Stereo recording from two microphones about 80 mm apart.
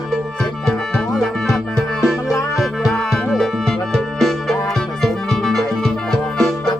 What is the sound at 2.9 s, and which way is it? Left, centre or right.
Music, centre.